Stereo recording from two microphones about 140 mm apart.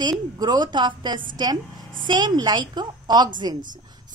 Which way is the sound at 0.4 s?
30° right (ahead or behind).